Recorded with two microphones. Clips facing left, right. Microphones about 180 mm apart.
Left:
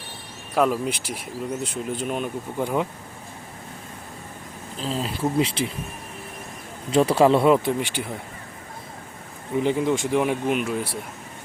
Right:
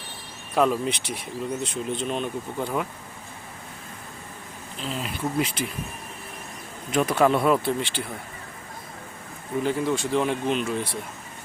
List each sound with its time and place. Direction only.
0.5 s speech: 5° left (ahead or behind)
4.8 s speech: 35° left (ahead or behind)
6.9 s speech: 30° left (ahead or behind); by 8.1 s 15° left (ahead or behind)
9.6 s speech: 20° left (ahead or behind)